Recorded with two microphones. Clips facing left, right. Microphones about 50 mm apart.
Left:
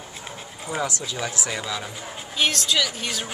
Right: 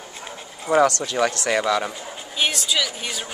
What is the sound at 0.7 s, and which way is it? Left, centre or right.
Speech, right.